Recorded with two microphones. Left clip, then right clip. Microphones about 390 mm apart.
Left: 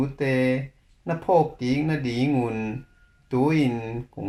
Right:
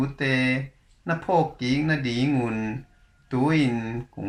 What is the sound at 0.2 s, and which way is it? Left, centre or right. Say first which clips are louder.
Speech: left 1 dB; centre.